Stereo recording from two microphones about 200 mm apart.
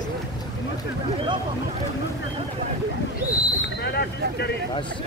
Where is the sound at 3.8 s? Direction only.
55° left (ahead or behind).